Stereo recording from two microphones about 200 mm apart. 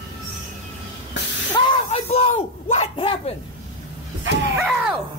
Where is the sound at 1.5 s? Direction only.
30° left (ahead or behind).